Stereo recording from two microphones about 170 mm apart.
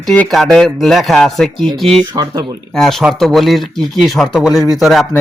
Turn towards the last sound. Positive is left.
turn(degrees=0)  # may be behind; listen again after turning